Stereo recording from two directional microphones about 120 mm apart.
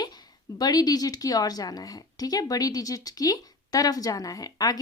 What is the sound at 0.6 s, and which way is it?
A woman's voice, 30° left (ahead or behind).